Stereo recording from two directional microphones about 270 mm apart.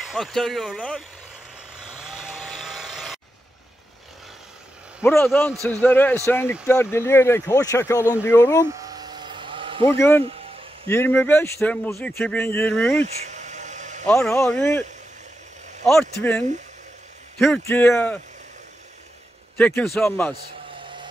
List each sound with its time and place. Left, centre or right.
0.0 s speech: centre
1.9 s chainsaw: centre
5.0 s speech: centre
8.8 s a sound: centre
9.8 s speech: centre
13.0 s a sound: right
14.0 s speech: centre
19.5 s speech: centre